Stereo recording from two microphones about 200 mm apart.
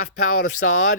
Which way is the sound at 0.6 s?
60° left (ahead or behind).